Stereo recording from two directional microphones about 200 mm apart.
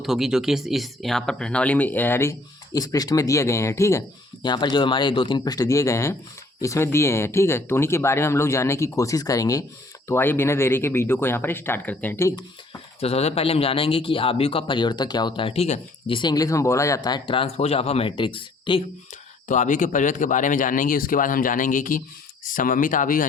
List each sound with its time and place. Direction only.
0.0 s a man's voice: centre (ahead or behind); by 12.8 s 15° left (ahead or behind)
13.0 s a man's voice: 30° left (ahead or behind)
19.5 s speech: 40° left (ahead or behind)